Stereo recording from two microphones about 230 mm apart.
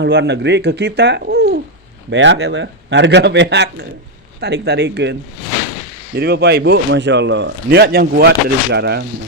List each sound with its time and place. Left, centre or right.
0.0 s speech: right
6.1 s speech: right